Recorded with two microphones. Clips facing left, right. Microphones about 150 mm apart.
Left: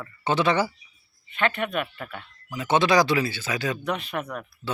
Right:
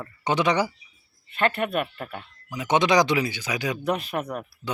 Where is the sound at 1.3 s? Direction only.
40° right (ahead or behind).